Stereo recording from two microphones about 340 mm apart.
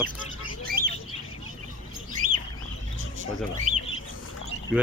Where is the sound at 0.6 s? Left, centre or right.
Right.